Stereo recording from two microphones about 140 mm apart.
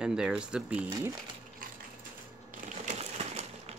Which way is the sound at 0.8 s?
30° right (ahead or behind).